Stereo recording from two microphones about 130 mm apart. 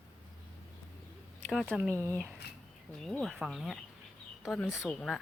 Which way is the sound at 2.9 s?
5° left (ahead or behind).